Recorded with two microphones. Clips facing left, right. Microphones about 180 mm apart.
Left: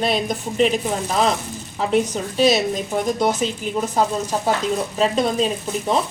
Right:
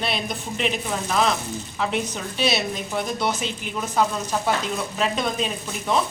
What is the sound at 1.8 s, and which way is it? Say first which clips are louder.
A woman's voice: left 7 dB; 40° left (ahead or behind).